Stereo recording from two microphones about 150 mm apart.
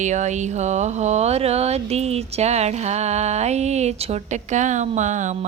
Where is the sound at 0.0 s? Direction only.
50° right (ahead or behind).